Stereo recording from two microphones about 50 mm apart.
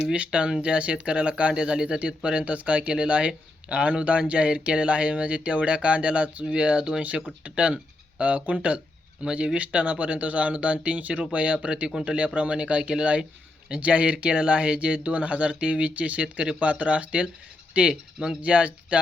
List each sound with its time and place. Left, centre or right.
0.1 s speech: right